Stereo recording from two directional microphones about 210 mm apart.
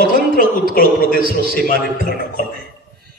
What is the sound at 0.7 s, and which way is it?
Speech, 40° left (ahead or behind).